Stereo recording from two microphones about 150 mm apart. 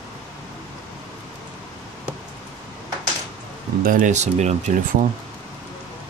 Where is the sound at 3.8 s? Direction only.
60° right (ahead or behind).